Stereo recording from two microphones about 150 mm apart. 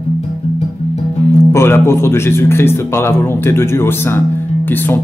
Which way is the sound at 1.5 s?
15° left (ahead or behind).